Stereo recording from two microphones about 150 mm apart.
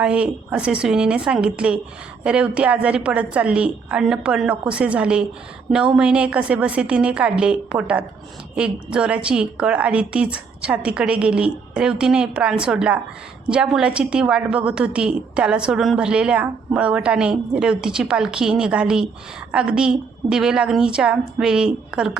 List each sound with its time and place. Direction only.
0.0 s a woman's voice: 5° right (ahead or behind)